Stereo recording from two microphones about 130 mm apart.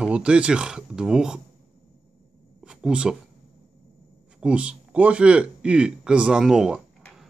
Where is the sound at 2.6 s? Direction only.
5° right (ahead or behind).